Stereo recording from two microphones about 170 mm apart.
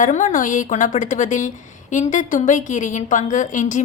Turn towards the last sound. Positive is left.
turn(degrees=45)  # may be behind; listen again after turning